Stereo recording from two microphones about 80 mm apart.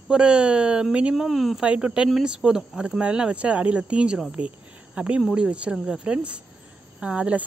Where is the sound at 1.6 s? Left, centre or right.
Centre.